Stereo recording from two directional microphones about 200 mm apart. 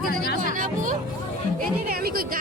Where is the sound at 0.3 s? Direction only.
40° right (ahead or behind).